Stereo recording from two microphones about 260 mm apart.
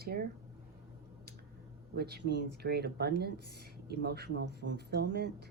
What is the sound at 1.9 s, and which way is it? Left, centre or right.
Speech, right.